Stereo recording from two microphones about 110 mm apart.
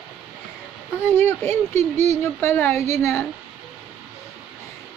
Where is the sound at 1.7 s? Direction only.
80° right.